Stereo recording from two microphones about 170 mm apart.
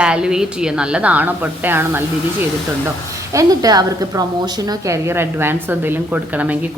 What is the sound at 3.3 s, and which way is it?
A woman's voice, 20° right (ahead or behind).